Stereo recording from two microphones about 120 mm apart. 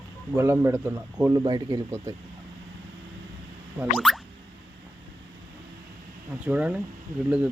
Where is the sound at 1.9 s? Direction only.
25° right (ahead or behind).